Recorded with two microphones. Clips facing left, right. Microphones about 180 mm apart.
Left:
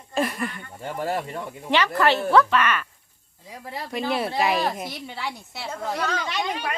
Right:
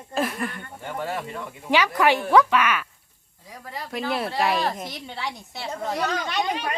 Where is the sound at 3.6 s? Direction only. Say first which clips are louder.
Left 2 dB; 30° left (ahead or behind).